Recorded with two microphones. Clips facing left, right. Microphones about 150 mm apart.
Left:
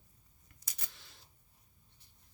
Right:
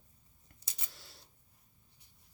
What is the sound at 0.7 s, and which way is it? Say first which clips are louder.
Camera: right 1 dB; 25° right (ahead or behind).